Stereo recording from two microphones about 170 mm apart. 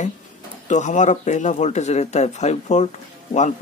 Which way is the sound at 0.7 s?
45° left (ahead or behind).